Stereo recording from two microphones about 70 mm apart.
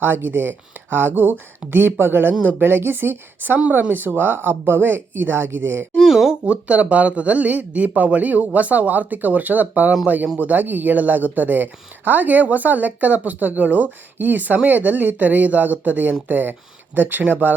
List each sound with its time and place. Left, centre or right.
0.0 s speech: right
6.0 s a sound: centre
6.4 s speech: centre